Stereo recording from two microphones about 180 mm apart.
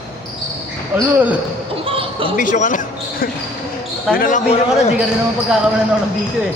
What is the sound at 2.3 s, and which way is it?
Speech, 45° left (ahead or behind).